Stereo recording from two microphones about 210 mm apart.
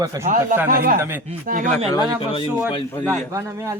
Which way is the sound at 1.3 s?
40° right (ahead or behind).